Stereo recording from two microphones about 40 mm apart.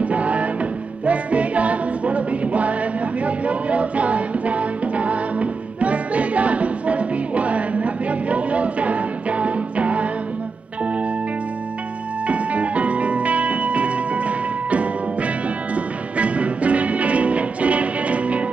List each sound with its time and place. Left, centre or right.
0.0 s music: right
12.3 s music: right